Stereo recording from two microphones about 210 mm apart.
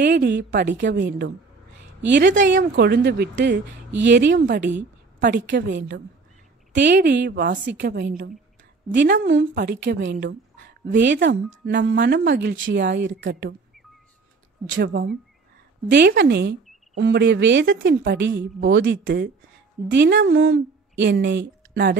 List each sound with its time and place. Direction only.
0.0 s a woman's voice: 55° right (ahead or behind)
9.6 s a woman's voice: 45° right (ahead or behind)
14.8 s a woman's voice: 55° right (ahead or behind)